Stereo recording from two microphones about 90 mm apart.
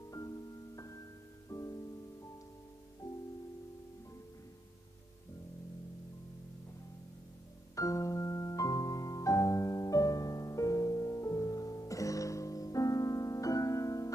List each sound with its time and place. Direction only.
0.1 s music: 40° left (ahead or behind)
7.7 s music: 35° left (ahead or behind)